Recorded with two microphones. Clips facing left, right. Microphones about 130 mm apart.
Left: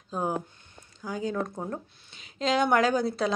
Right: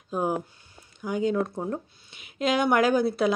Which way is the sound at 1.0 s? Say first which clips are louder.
Right 5 dB; 20° right (ahead or behind).